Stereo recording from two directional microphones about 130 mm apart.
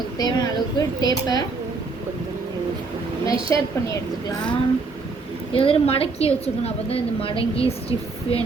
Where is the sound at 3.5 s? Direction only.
20° left (ahead or behind).